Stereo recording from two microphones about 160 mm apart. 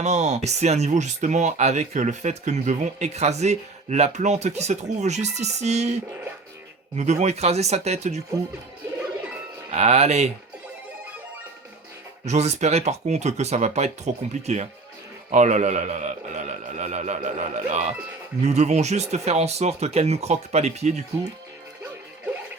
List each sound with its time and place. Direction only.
0.0 s speech: 45° right (ahead or behind)
9.6 s speech: 40° right (ahead or behind)
12.2 s speech: 45° right (ahead or behind)